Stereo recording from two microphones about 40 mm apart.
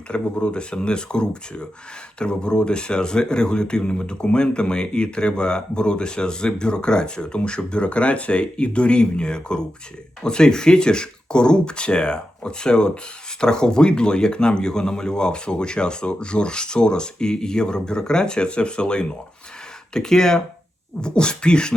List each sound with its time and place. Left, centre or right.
0.1 s speech: left